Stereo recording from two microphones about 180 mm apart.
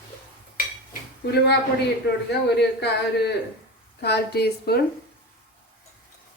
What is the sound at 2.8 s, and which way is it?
Speech, 65° left (ahead or behind).